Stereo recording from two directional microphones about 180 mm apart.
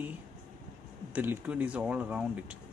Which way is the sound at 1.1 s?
10° right (ahead or behind).